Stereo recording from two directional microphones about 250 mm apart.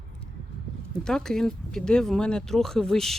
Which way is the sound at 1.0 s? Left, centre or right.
Centre.